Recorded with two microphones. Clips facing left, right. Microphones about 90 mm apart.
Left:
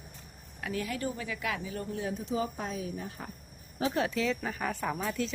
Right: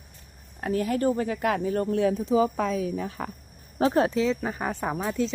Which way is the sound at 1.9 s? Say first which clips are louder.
Right 11 dB; 90° right.